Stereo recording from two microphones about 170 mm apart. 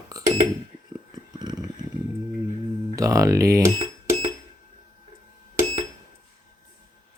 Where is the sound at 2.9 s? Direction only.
20° right (ahead or behind).